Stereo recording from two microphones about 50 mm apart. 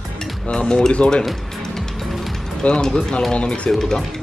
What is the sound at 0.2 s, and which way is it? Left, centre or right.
Speech, centre.